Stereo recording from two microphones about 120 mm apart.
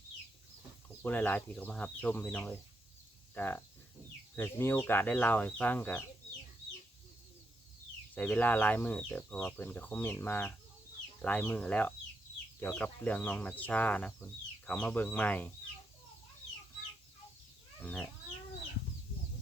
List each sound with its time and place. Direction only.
1.0 s speech: 15° left (ahead or behind)
8.1 s speech: 15° left (ahead or behind)
17.8 s chicken: 10° left (ahead or behind)